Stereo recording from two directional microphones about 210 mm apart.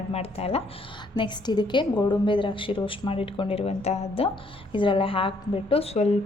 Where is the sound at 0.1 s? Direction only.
30° left (ahead or behind).